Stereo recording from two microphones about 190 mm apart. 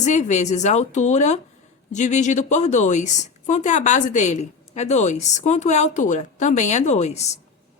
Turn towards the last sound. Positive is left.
turn(degrees=35)  # may be behind; listen again after turning